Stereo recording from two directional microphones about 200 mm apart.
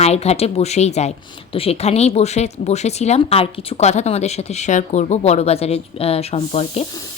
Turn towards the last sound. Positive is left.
turn(degrees=30)  # may be behind; listen again after turning